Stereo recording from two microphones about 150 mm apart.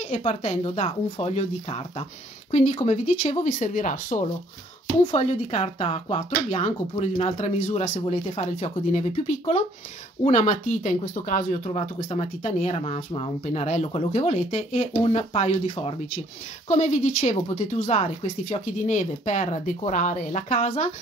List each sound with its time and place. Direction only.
0.0 s speech: 50° left (ahead or behind)
5.0 s speech: 45° left (ahead or behind)